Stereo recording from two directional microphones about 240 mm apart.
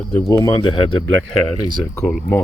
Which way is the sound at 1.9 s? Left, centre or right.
Centre.